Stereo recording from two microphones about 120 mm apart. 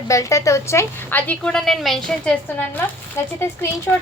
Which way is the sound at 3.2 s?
20° left (ahead or behind).